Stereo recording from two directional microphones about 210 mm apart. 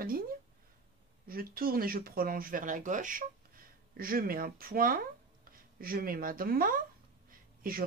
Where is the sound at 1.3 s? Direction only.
45° right (ahead or behind).